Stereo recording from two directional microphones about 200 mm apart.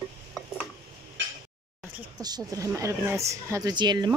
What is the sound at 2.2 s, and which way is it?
A woman's voice, 20° right (ahead or behind).